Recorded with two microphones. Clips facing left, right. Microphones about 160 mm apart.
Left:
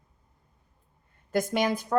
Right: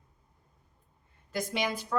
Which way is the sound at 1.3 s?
50° left (ahead or behind).